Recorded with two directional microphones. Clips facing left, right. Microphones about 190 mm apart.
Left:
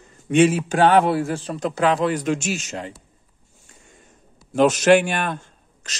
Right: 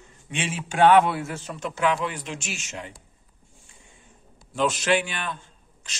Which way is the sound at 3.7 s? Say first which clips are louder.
Left 6 dB; 45° left (ahead or behind).